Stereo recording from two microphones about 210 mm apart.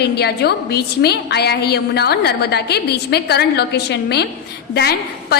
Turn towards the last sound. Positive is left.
turn(degrees=50)  # may be behind; listen again after turning